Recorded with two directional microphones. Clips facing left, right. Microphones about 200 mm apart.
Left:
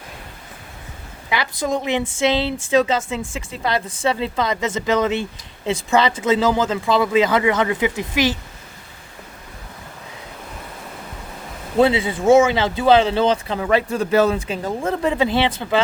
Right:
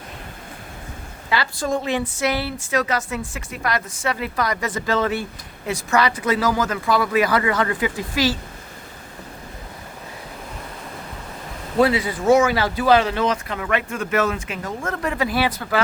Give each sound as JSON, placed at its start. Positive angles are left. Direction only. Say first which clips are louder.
{"t": 1.3, "sound": "speech", "louder": "left 1 dB", "side_deg": 20}
{"t": 11.8, "sound": "speech", "louder": "left 2 dB", "side_deg": 25}